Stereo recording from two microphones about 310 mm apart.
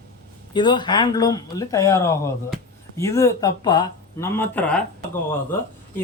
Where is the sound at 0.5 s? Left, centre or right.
Centre.